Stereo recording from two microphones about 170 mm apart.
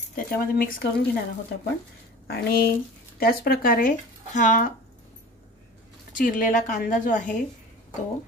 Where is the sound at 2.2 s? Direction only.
65° left (ahead or behind); by 4.7 s 50° left (ahead or behind).